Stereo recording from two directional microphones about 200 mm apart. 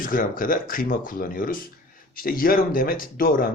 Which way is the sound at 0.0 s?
45° left (ahead or behind).